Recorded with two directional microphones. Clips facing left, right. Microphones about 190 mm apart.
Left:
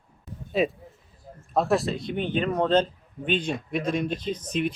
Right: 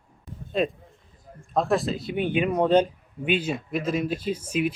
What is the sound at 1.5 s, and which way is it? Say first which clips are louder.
Speech: even; centre (ahead or behind).